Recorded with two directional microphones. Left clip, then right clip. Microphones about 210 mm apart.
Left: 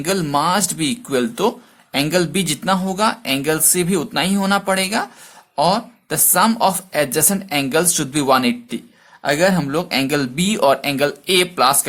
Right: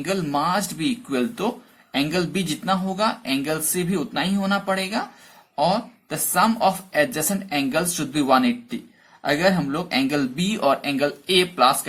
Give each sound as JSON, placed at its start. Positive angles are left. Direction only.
{"t": 0.0, "sound": "speech", "side_deg": 40}